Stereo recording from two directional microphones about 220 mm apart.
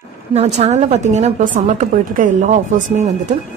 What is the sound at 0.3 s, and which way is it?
A woman's voice, 30° right (ahead or behind).